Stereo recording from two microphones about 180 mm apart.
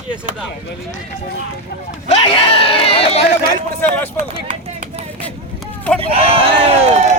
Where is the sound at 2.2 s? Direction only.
30° left (ahead or behind).